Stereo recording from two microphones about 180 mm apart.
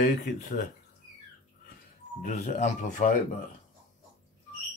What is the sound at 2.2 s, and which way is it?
Speech, 45° left (ahead or behind).